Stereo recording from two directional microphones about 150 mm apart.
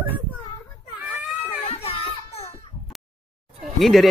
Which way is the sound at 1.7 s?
40° left (ahead or behind).